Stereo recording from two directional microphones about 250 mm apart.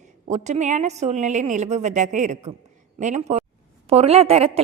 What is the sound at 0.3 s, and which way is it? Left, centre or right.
A woman's voice, right.